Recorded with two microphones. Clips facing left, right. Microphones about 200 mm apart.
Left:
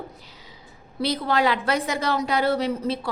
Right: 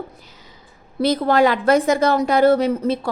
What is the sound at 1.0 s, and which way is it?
A woman's voice, 50° right (ahead or behind).